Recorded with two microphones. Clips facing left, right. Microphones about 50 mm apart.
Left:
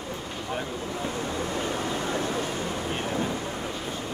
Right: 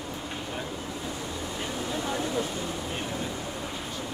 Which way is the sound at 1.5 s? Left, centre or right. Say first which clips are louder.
Left 3 dB; left.